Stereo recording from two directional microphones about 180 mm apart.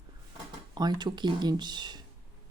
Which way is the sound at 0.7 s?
25° right (ahead or behind).